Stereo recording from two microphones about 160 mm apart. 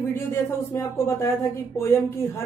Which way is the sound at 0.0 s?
15° left (ahead or behind).